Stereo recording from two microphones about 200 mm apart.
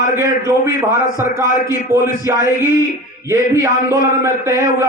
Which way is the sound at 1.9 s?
15° right (ahead or behind).